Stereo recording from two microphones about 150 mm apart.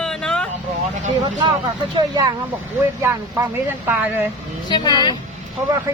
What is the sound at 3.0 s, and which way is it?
Speech, 15° right (ahead or behind).